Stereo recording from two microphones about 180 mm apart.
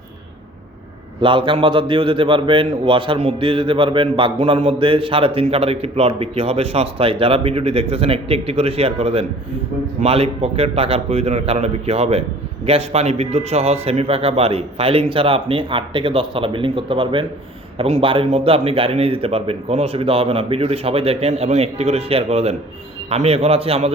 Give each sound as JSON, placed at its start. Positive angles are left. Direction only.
{"t": 1.2, "sound": "a man's voice", "side_deg": -30}